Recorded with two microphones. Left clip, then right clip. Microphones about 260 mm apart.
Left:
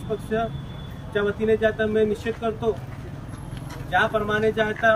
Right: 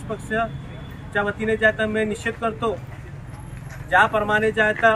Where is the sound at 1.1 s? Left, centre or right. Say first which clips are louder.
Left 1 dB; centre.